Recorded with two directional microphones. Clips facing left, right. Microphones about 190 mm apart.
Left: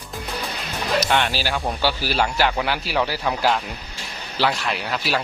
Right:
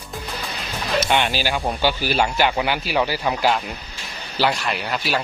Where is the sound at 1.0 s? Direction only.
Centre (ahead or behind).